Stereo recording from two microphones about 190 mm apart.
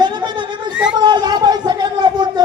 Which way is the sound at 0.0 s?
25° right (ahead or behind).